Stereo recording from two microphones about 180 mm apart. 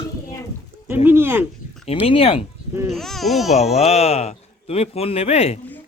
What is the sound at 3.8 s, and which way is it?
Speech, 35° left (ahead or behind).